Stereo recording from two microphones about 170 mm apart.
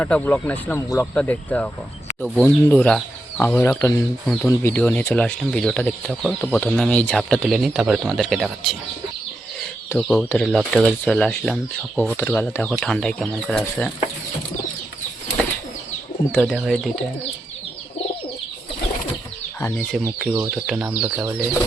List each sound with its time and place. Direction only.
0.0 s speech: 10° left (ahead or behind)
3.7 s speech: 15° left (ahead or behind); by 8.7 s centre (ahead or behind)
10.1 s speech: 5° left (ahead or behind)
16.3 s speech: centre (ahead or behind)
19.5 s speech: 10° left (ahead or behind)
20.1 s speech: 5° right (ahead or behind)